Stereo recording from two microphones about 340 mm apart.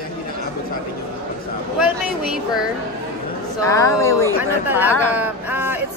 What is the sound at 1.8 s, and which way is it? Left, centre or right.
Speech, centre.